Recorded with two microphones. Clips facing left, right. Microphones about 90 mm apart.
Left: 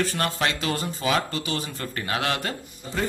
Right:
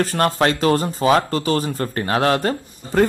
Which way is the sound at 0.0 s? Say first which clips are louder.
Right 7 dB; 40° right (ahead or behind).